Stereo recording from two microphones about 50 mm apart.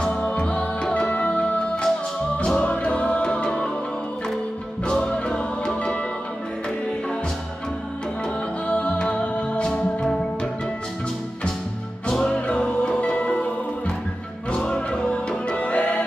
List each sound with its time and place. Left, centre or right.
0.0 s music: left
1.0 s music: left
4.8 s music: centre
8.6 s music: left
9.8 s music: centre
12.1 s music: centre